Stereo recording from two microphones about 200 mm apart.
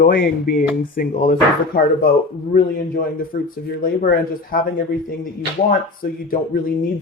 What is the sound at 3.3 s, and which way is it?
A man's voice, 45° left (ahead or behind).